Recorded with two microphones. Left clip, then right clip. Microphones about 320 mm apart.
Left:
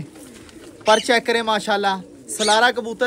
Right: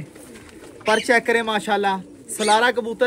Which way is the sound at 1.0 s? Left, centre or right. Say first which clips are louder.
Even; centre.